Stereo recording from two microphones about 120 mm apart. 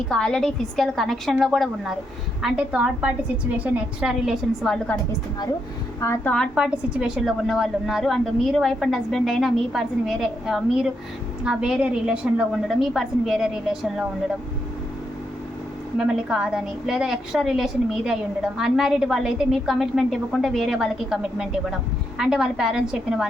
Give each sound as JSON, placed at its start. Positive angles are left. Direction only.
{"t": 0.1, "sound": "a woman's voice", "side_deg": 5}
{"t": 6.0, "sound": "a woman's voice", "side_deg": 20}
{"t": 6.5, "sound": "a woman's voice", "side_deg": -5}
{"t": 16.0, "sound": "a woman's voice", "side_deg": -5}